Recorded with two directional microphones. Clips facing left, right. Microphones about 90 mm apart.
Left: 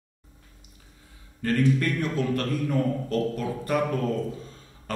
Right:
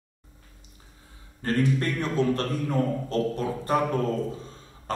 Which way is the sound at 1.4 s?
30° right (ahead or behind).